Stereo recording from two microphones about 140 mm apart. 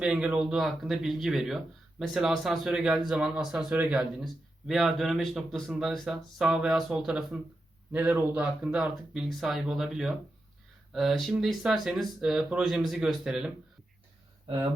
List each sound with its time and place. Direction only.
0.0 s a man's voice: 10° right (ahead or behind)
14.4 s speech: 35° right (ahead or behind)